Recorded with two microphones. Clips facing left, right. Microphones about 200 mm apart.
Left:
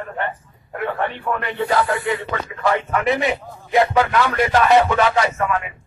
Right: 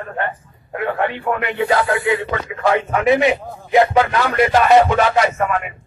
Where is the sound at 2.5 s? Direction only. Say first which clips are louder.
Right 3 dB; 20° right (ahead or behind).